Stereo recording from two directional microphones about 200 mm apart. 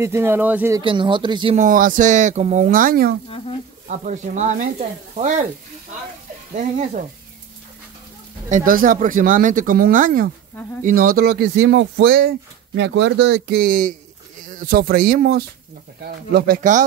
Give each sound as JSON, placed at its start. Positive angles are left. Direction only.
{"t": 0.0, "sound": "speech", "side_deg": -10}
{"t": 0.7, "sound": "speech", "side_deg": -25}
{"t": 1.6, "sound": "speech", "side_deg": -40}
{"t": 6.5, "sound": "speech", "side_deg": -35}
{"t": 8.5, "sound": "speech", "side_deg": -40}